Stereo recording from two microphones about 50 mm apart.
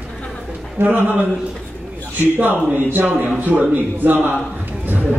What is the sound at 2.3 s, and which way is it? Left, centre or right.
A man's voice, right.